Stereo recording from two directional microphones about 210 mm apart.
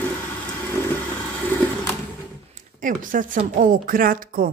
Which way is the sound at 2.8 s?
40° right (ahead or behind).